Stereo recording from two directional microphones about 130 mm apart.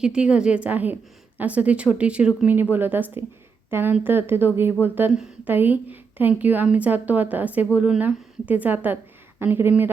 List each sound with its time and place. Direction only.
0.0 s a woman's voice: 5° right (ahead or behind)
5.1 s a woman's voice: 5° right (ahead or behind)